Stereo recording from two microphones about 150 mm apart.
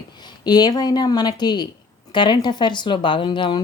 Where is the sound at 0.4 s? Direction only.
25° left (ahead or behind).